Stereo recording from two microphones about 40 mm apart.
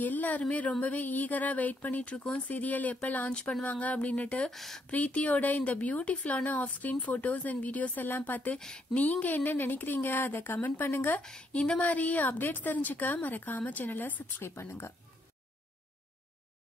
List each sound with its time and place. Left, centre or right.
0.0 s speech: left
1.0 s speech: left
3.3 s speech: left
3.8 s speech: left
4.5 s speech: centre
4.9 s speech: left
7.9 s speech: left
8.5 s speech: centre
8.9 s speech: left
11.2 s speech: left
11.8 s speech: left
14.4 s speech: left